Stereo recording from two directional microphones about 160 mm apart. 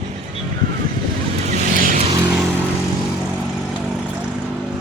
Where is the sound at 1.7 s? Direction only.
55° right (ahead or behind).